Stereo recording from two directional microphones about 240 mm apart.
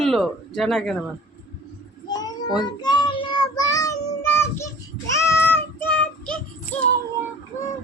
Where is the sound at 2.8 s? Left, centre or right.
Centre.